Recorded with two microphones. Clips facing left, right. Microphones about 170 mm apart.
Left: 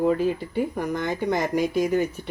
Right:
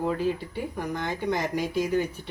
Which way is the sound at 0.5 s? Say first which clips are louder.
Left 6 dB; 50° left (ahead or behind).